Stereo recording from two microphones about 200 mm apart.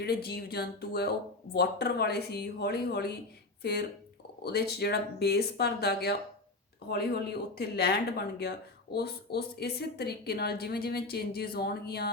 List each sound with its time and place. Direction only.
0.0 s a woman's voice: 55° left (ahead or behind)